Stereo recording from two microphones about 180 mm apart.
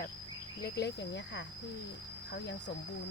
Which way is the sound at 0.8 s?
75° left (ahead or behind).